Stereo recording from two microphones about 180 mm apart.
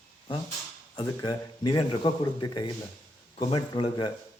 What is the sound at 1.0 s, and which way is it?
Speech, 20° left (ahead or behind).